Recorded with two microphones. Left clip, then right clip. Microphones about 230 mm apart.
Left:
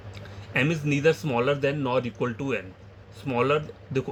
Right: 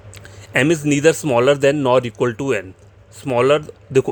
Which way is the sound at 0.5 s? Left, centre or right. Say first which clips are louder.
Right 9 dB; right.